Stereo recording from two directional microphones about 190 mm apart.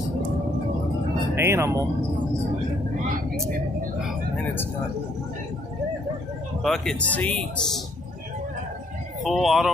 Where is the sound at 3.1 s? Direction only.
45° right (ahead or behind).